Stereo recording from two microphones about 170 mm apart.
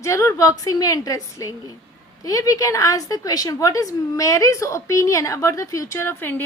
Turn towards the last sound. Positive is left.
turn(degrees=15)  # may be behind; listen again after turning